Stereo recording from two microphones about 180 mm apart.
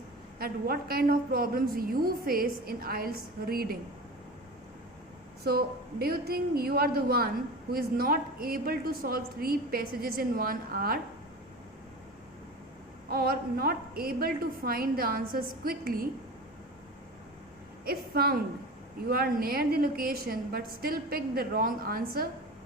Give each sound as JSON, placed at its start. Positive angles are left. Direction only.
{"t": 0.3, "sound": "a woman's voice", "side_deg": -55}
{"t": 5.4, "sound": "a woman's voice", "side_deg": -60}
{"t": 13.1, "sound": "a woman's voice", "side_deg": -60}
{"t": 17.8, "sound": "a woman's voice", "side_deg": -60}